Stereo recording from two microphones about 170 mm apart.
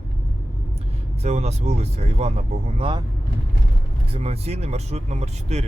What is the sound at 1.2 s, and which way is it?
Speech, 40° right (ahead or behind).